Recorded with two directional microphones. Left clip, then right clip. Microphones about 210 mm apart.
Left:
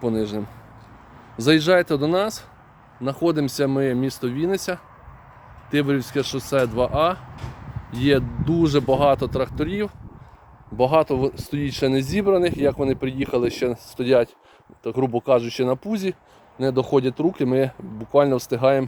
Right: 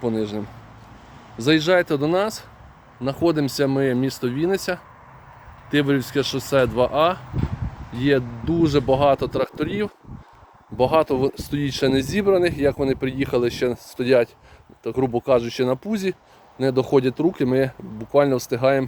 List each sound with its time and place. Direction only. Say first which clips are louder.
0.0 s speech: even; 15° left (ahead or behind); by 7.2 s centre (ahead or behind)
7.9 s speech: even; 15° left (ahead or behind)